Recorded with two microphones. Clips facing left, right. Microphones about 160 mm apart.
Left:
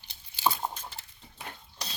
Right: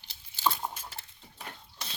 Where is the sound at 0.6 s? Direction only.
25° left (ahead or behind).